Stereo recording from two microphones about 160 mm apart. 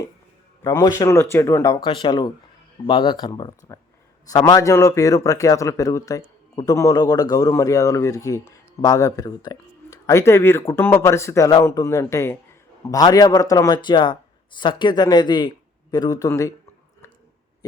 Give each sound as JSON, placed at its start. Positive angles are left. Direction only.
{"t": 0.6, "sound": "speech", "side_deg": 20}